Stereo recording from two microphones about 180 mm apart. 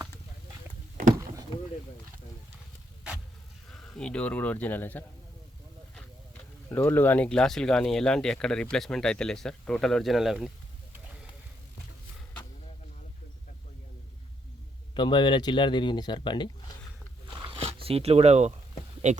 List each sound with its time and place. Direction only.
3.7 s speech: 5° left (ahead or behind)
6.7 s speech: 15° left (ahead or behind)
14.9 s speech: 25° left (ahead or behind)
17.2 s a sound: 30° right (ahead or behind)
19.0 s speech: 40° right (ahead or behind)